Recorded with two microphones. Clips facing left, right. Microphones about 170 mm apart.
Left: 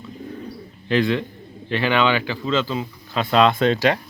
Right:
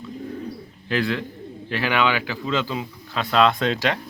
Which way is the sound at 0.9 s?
5° right (ahead or behind).